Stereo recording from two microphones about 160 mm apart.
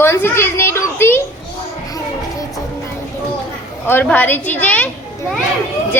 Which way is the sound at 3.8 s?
10° left (ahead or behind).